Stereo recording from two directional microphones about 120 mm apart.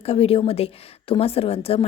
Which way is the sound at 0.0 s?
55° left (ahead or behind).